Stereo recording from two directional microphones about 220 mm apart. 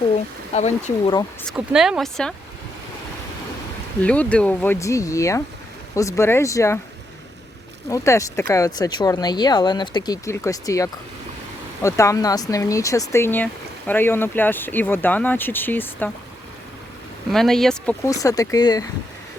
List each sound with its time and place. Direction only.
0.5 s speech: 30° left (ahead or behind)
1.5 s speech: centre (ahead or behind)
4.0 s speech: 5° left (ahead or behind)
7.9 s speech: 15° left (ahead or behind)
17.3 s speech: centre (ahead or behind)
18.0 s speech: 15° left (ahead or behind)